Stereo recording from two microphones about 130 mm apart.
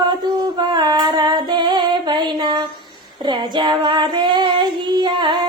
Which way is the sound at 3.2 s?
35° right (ahead or behind).